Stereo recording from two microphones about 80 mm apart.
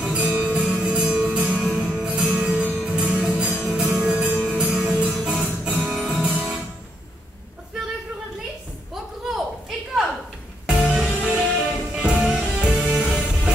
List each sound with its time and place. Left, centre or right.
0.0 s music: centre
5.3 s music: centre
9.2 s a sound: centre
10.7 s music: centre